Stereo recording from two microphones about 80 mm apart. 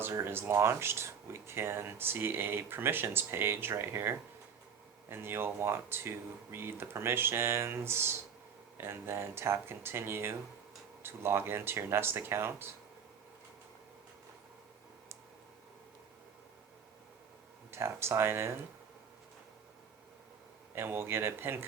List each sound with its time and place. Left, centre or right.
0.0 s speech: right
17.7 s speech: right
20.7 s speech: right